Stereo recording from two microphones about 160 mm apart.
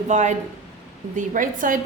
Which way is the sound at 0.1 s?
50° right (ahead or behind).